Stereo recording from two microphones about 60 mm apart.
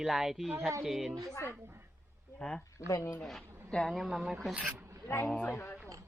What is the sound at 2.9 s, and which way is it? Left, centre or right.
Speech, left.